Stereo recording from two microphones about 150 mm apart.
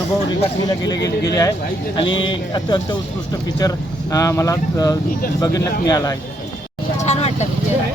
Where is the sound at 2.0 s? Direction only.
35° left (ahead or behind).